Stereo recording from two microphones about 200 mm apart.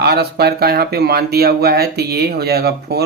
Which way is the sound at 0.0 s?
55° right (ahead or behind).